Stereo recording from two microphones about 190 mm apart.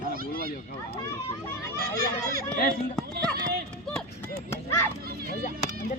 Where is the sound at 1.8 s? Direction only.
50° right (ahead or behind).